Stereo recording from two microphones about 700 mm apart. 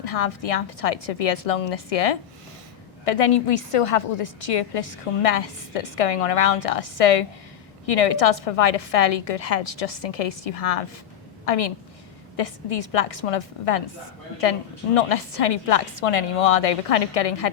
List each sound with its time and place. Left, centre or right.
0.0 s a woman's voice: left
14.9 s a woman's voice: left